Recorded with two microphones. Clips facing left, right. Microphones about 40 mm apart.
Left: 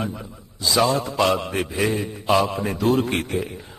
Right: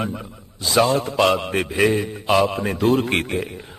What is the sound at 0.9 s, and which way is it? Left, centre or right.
Speech, right.